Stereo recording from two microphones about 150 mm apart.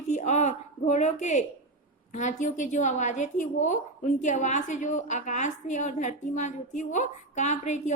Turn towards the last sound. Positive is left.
turn(degrees=50)  # may be behind; listen again after turning